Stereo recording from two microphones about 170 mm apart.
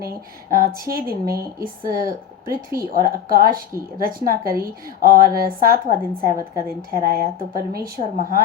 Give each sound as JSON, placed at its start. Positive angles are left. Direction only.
{"t": 0.5, "sound": "speech", "side_deg": -60}
{"t": 4.2, "sound": "speech", "side_deg": -20}
{"t": 4.9, "sound": "speech", "side_deg": -60}